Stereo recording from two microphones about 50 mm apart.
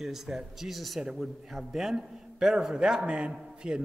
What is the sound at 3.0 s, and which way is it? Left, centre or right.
Speech, right.